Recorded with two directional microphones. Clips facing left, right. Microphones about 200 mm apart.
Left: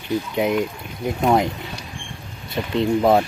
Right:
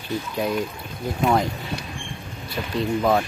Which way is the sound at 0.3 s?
20° left (ahead or behind).